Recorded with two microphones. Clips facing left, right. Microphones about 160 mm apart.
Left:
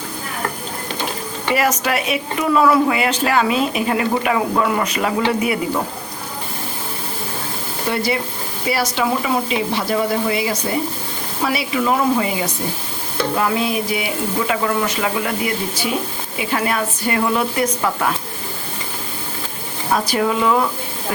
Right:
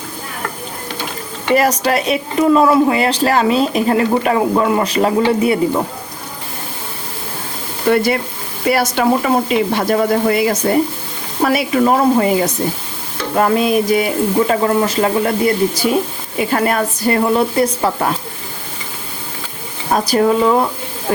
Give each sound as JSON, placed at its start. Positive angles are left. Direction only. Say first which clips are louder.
{"t": 1.5, "sound": "a man's voice", "louder": "right 5 dB", "side_deg": -35}
{"t": 7.9, "sound": "speech", "louder": "right 7 dB", "side_deg": -55}
{"t": 14.4, "sound": "a man's voice", "louder": "right 5 dB", "side_deg": -35}
{"t": 19.9, "sound": "a man's voice", "louder": "right 5 dB", "side_deg": -40}